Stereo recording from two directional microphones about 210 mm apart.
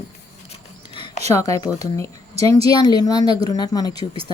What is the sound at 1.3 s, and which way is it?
A woman's voice, 15° left (ahead or behind).